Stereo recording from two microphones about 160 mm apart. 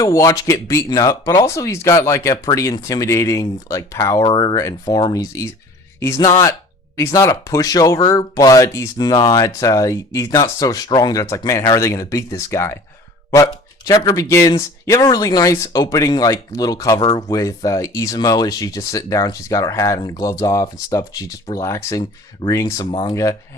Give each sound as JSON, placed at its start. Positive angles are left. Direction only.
{"t": 0.0, "sound": "speech", "side_deg": 20}
{"t": 22.9, "sound": "speech", "side_deg": 30}
{"t": 23.1, "sound": "speech", "side_deg": 20}